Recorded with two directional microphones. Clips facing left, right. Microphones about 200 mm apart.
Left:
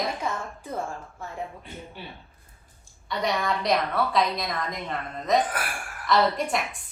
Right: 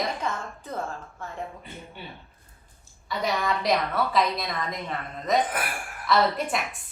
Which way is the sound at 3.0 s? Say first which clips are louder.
Even; centre (ahead or behind).